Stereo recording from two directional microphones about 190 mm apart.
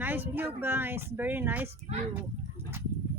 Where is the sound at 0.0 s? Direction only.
10° right (ahead or behind).